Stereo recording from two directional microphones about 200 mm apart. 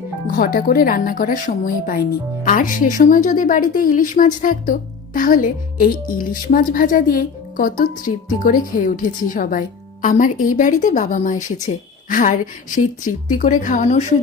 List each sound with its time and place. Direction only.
0.3 s a woman's voice: 45° left (ahead or behind)